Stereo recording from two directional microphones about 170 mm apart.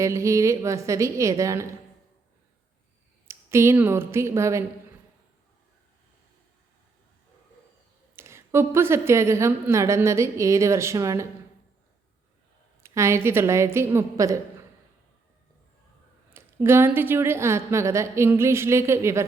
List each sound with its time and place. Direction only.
0.0 s a woman's voice: 15° right (ahead or behind)
3.2 s speech: 15° right (ahead or behind)
8.1 s a woman's voice: 15° right (ahead or behind)
12.8 s a woman's voice: 15° right (ahead or behind)
16.3 s a woman's voice: 15° right (ahead or behind)